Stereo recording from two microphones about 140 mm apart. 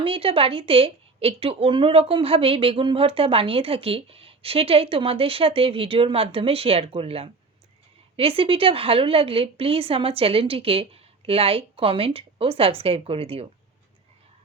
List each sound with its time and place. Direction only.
0.0 s a woman's voice: 40° right (ahead or behind)